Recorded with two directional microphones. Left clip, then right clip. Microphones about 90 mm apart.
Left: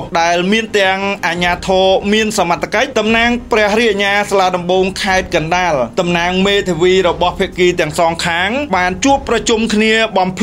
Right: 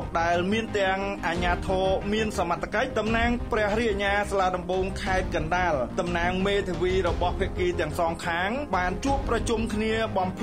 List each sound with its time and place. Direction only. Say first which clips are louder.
0.1 s speech: left 12 dB; 25° left (ahead or behind)
1.7 s speech: left 17 dB; 15° left (ahead or behind)
5.0 s speech: left 13 dB; 30° left (ahead or behind)
6.3 s speech: left 13 dB; 20° left (ahead or behind)